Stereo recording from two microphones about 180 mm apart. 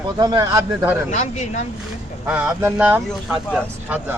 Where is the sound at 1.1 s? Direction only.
40° left (ahead or behind).